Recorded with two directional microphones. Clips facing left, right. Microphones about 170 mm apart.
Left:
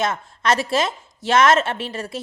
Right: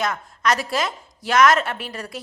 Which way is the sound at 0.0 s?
25° left (ahead or behind).